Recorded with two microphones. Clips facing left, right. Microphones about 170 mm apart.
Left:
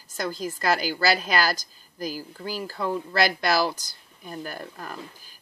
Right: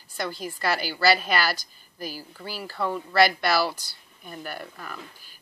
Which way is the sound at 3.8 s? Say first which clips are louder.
Left 2 dB; 40° left (ahead or behind).